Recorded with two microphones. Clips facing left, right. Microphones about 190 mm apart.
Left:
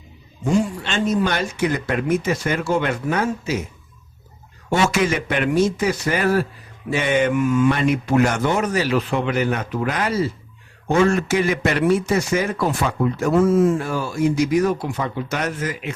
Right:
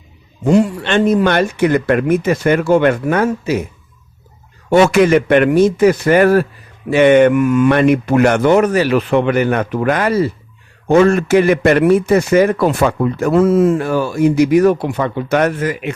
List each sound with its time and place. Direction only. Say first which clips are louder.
0.4 s a man's voice: right 7 dB; 65° right (ahead or behind)
4.7 s a man's voice: right 9 dB; 60° right (ahead or behind)